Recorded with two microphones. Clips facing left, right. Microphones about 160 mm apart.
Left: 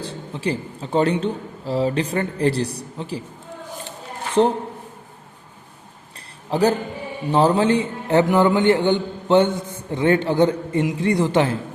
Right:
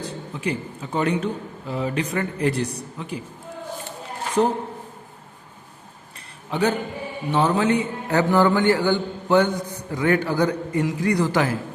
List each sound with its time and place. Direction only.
0.0 s a man's voice: 30° left (ahead or behind)
4.4 s a man's voice: 30° left (ahead or behind)
6.1 s a sound: 35° left (ahead or behind)
7.3 s a man's voice: 35° left (ahead or behind)